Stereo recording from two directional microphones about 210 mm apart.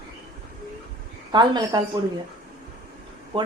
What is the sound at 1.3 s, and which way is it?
Speech, 20° right (ahead or behind).